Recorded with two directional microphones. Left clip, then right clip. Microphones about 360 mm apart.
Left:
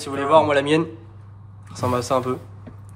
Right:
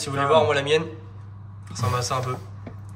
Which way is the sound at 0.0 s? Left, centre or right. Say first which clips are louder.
Left 2 dB; centre.